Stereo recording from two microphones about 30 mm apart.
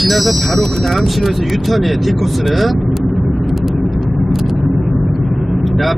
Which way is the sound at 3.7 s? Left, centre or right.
Centre.